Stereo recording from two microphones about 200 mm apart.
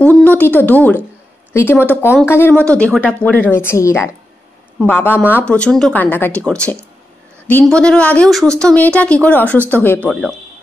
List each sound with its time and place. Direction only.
0.0 s speech: 10° left (ahead or behind)